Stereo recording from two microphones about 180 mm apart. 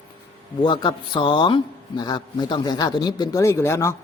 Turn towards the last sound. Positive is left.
turn(degrees=15)  # may be behind; listen again after turning